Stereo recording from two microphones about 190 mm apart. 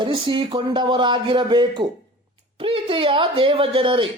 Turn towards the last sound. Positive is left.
turn(degrees=-25)  # may be behind; listen again after turning